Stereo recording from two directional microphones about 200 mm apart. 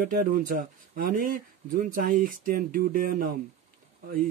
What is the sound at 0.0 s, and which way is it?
Speech, 45° right (ahead or behind).